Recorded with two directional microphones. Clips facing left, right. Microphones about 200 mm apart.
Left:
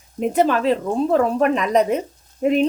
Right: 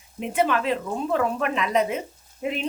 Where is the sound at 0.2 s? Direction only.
40° left (ahead or behind).